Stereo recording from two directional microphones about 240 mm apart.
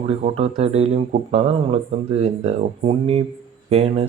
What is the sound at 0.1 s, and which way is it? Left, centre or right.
Speech, right.